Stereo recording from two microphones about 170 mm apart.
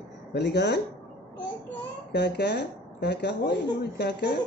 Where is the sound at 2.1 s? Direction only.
75° left (ahead or behind).